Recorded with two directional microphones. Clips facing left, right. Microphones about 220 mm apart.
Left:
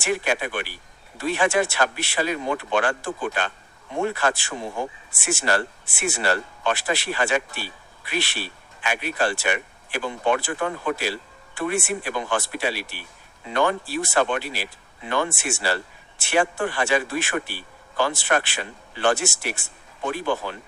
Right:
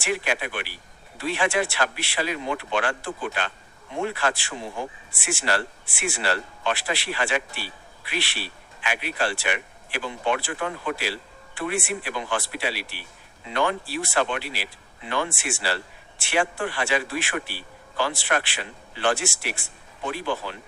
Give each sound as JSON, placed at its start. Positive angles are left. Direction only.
{"t": 0.0, "sound": "speech", "side_deg": 45}